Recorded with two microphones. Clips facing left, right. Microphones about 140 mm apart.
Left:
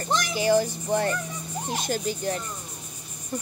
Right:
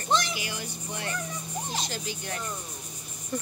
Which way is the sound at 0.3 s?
40° left (ahead or behind).